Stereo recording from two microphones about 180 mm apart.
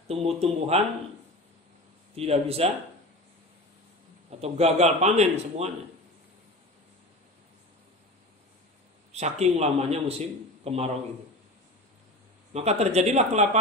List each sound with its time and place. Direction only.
0.1 s a man's voice: 35° right (ahead or behind)
2.1 s a man's voice: 35° right (ahead or behind)
4.3 s a man's voice: 35° right (ahead or behind)
9.1 s a man's voice: 35° right (ahead or behind)
12.5 s a man's voice: 35° right (ahead or behind)